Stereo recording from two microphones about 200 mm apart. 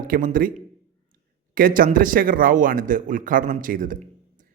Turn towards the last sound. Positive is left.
turn(degrees=-45)  # may be behind; listen again after turning